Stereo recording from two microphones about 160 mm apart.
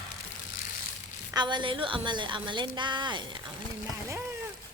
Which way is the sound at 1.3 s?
30° right (ahead or behind).